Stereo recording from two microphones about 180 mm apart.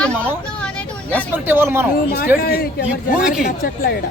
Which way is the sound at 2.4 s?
60° left (ahead or behind).